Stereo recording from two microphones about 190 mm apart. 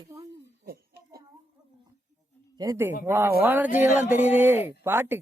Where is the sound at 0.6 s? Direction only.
55° right (ahead or behind).